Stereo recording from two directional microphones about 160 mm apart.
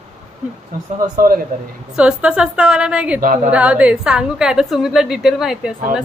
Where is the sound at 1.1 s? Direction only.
65° right (ahead or behind).